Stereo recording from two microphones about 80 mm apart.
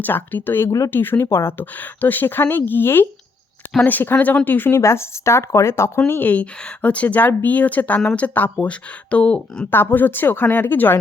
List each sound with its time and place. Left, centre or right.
0.0 s speech: left
1.5 s speech: left
6.1 s speech: left
9.7 s speech: left